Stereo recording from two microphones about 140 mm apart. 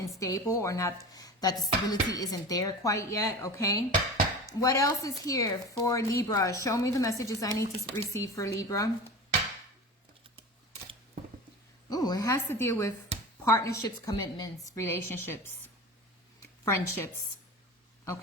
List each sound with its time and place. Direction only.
0.0 s a woman's voice: 25° left (ahead or behind)
11.9 s a woman's voice: 30° left (ahead or behind)
16.6 s a woman's voice: 20° left (ahead or behind)